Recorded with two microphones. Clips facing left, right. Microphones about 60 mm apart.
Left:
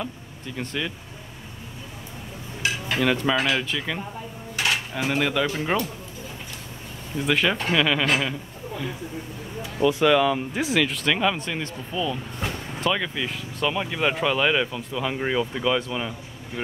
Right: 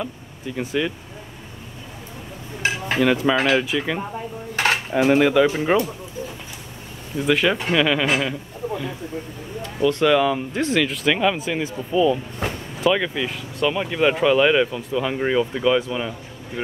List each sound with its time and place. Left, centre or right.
0.0 s speech: centre
3.0 s speech: centre
4.6 s cutlery: right
4.9 s speech: centre
7.2 s speech: centre